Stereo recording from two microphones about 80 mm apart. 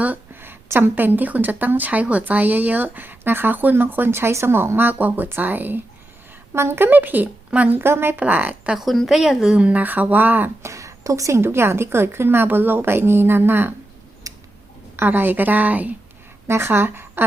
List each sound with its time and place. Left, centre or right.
0.0 s speech: right
8.7 s a woman's voice: centre; by 10.5 s right
10.6 s speech: right
14.3 s tick-tock: right
14.9 s speech: right
16.5 s a woman's voice: right